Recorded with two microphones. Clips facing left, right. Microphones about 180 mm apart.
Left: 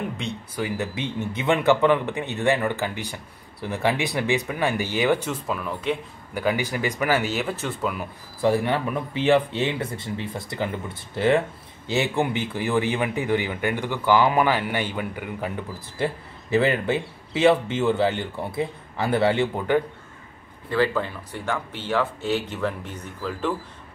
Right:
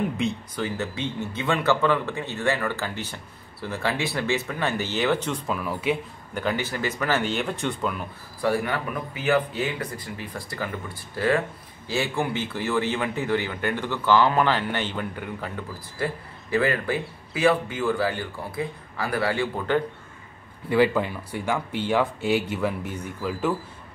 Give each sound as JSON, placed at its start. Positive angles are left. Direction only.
{"t": 0.2, "sound": "speech", "side_deg": 0}
{"t": 0.6, "sound": "speech", "side_deg": 15}
{"t": 6.3, "sound": "speech", "side_deg": 10}
{"t": 8.4, "sound": "speech", "side_deg": 25}
{"t": 20.7, "sound": "speech", "side_deg": -15}